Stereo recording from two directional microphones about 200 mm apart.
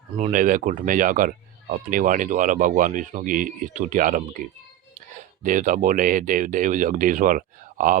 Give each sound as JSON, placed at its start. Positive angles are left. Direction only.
{"t": 0.2, "sound": "speech", "side_deg": -40}